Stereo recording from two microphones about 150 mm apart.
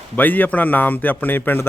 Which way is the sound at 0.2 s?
10° left (ahead or behind).